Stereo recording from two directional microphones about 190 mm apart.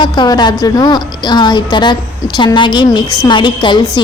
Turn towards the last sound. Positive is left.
turn(degrees=25)  # may be behind; listen again after turning